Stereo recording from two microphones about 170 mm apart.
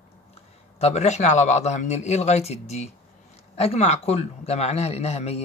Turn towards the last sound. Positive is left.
turn(degrees=40)  # may be behind; listen again after turning